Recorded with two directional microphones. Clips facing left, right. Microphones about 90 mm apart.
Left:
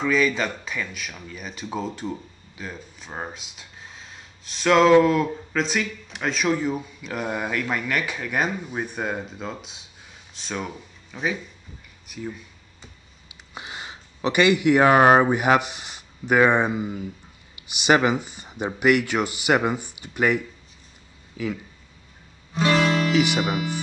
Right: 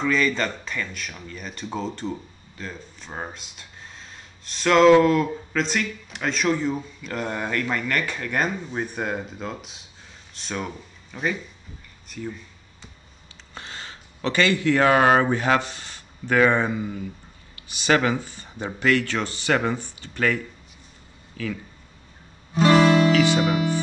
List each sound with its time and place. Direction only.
0.0 s speech: 5° left (ahead or behind)
13.6 s speech: 15° left (ahead or behind)
22.5 s guitar: 30° right (ahead or behind)
23.1 s speech: 15° left (ahead or behind)